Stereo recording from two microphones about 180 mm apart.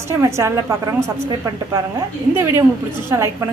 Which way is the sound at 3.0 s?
15° right (ahead or behind).